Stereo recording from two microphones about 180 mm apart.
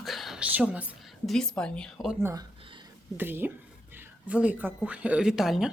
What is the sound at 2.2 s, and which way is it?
Speech, 15° right (ahead or behind).